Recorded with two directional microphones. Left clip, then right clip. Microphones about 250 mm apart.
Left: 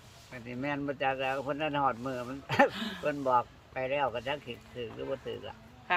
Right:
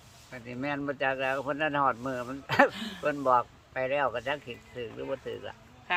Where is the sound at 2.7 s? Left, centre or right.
Centre.